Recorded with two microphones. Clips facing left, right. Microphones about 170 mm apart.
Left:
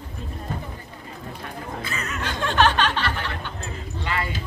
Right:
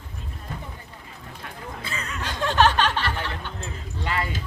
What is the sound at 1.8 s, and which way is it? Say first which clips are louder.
Chuckle: left 1 dB; 30° right (ahead or behind).